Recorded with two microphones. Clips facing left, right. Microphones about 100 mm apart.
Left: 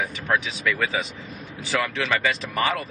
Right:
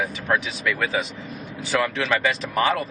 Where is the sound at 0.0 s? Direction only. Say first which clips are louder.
Right 1 dB; centre (ahead or behind).